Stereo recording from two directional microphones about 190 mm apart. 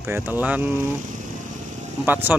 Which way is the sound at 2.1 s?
10° right (ahead or behind).